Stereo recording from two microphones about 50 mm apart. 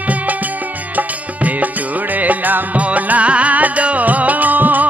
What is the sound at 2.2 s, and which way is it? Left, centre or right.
Music, right.